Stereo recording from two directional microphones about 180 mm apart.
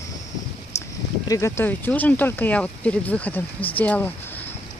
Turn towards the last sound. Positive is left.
turn(degrees=10)  # may be behind; listen again after turning